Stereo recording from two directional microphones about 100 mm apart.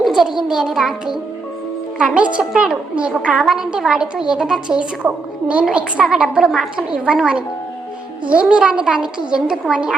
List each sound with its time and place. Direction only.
0.0 s a sound: 5° right (ahead or behind)
0.4 s music: 5° right (ahead or behind)
2.0 s a woman's voice: 10° right (ahead or behind)